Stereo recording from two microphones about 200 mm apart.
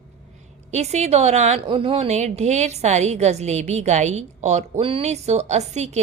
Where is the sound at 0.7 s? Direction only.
35° right (ahead or behind).